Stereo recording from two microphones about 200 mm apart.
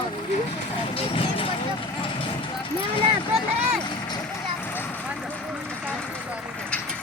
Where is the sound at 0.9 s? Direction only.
30° left (ahead or behind).